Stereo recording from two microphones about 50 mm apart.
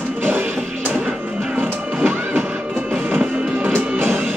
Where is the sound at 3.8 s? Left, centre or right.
Right.